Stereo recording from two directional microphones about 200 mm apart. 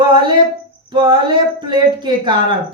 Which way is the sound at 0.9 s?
25° right (ahead or behind).